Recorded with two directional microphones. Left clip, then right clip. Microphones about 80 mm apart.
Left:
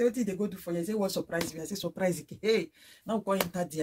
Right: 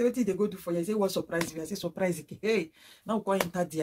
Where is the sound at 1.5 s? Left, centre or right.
Centre.